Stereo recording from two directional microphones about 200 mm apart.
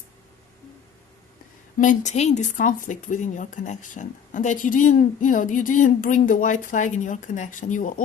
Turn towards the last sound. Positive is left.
turn(degrees=40)  # may be behind; listen again after turning